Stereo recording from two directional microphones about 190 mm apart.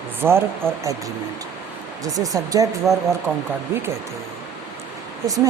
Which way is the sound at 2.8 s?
Centre (ahead or behind).